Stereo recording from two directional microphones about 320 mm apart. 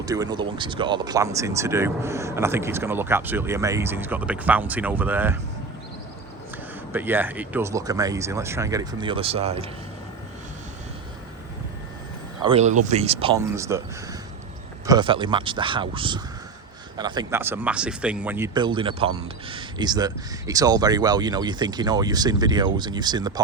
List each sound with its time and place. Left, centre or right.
0.0 s speech: centre
6.9 s speech: centre
12.4 s speech: centre
14.8 s speech: centre